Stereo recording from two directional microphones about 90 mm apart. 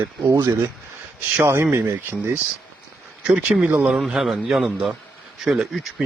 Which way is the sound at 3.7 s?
10° right (ahead or behind).